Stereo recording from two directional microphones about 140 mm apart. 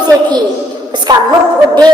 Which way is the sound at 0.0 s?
30° right (ahead or behind).